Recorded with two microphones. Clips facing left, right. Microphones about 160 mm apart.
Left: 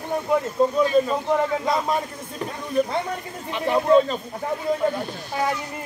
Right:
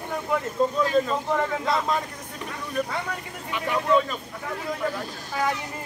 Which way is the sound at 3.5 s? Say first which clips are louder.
Left 5 dB; 30° left (ahead or behind).